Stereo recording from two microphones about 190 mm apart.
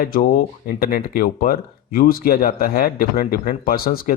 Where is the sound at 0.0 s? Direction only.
50° left (ahead or behind).